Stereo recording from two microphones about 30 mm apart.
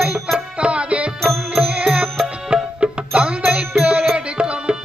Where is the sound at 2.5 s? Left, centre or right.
Right.